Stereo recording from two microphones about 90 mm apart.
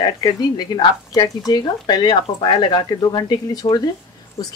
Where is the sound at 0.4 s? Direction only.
50° left (ahead or behind).